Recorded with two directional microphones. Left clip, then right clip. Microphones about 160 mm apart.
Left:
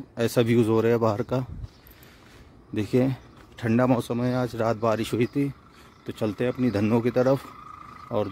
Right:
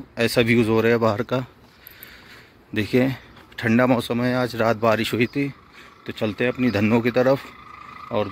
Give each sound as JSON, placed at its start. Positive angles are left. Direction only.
{"t": 0.1, "sound": "speech", "side_deg": 25}
{"t": 2.7, "sound": "speech", "side_deg": 15}